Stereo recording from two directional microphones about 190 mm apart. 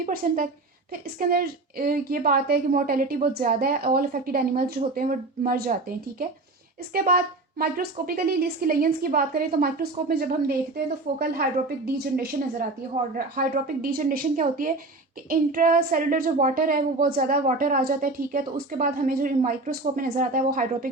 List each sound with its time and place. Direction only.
0.0 s a woman's voice: 50° right (ahead or behind)
6.9 s a woman's voice: 50° right (ahead or behind)